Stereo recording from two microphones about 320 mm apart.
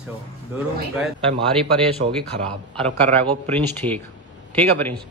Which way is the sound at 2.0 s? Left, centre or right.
Right.